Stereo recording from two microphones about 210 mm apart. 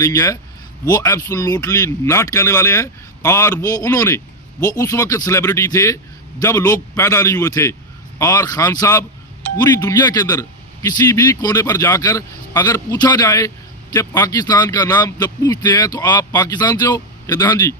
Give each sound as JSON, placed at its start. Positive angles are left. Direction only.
{"t": 0.0, "sound": "a man's voice", "side_deg": 15}